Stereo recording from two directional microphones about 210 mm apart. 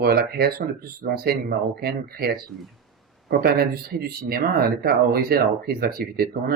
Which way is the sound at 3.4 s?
50° right (ahead or behind).